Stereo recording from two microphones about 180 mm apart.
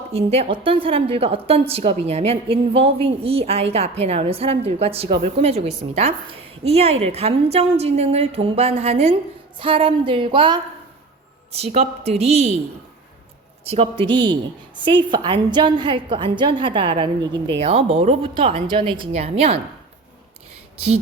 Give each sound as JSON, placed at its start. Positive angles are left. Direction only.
{"t": 0.1, "sound": "a woman's voice", "side_deg": -35}
{"t": 13.7, "sound": "a woman's voice", "side_deg": -30}
{"t": 20.7, "sound": "speech", "side_deg": -35}